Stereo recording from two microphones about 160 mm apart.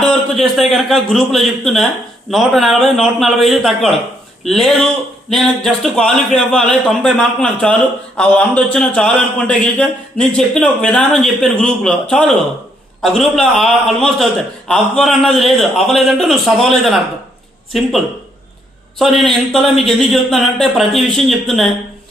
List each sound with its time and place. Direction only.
0.0 s speech: 5° left (ahead or behind)
18.9 s speech: centre (ahead or behind)